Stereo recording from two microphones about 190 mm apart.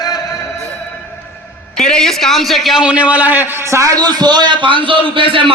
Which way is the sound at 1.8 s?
5° left (ahead or behind).